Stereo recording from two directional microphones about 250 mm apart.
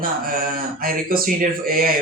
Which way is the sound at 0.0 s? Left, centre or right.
Right.